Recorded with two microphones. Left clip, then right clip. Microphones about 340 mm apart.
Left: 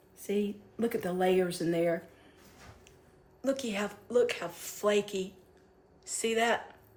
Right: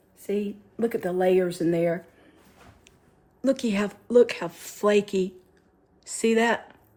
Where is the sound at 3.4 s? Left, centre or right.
Right.